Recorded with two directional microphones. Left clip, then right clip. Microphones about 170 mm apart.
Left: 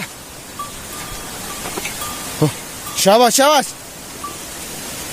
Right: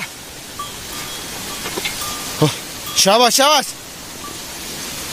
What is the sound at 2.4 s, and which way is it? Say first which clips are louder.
Speech: right 2 dB; 10° left (ahead or behind).